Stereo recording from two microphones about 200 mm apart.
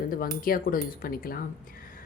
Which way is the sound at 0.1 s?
45° left (ahead or behind).